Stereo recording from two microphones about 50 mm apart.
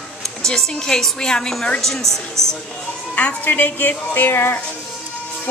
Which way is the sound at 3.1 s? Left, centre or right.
Left.